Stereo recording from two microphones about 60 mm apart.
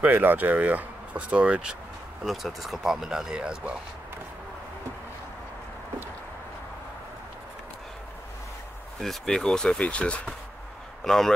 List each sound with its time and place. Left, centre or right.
0.0 s speech: right
2.2 s speech: centre
9.0 s speech: centre
11.1 s speech: centre